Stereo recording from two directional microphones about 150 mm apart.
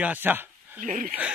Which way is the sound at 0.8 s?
65° right (ahead or behind).